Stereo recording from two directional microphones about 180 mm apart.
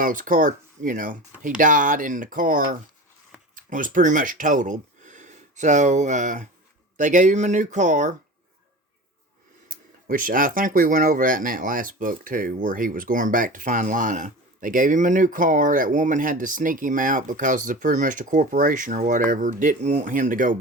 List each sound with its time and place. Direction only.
0.0 s speech: 50° right (ahead or behind)
9.6 s speech: 50° right (ahead or behind)